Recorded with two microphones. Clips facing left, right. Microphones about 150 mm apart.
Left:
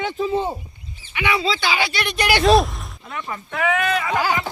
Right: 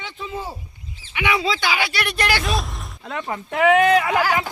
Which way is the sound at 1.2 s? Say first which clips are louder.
Even; 15° right (ahead or behind).